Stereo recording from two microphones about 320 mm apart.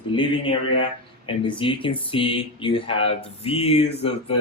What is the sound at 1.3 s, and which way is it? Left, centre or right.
Speech, centre.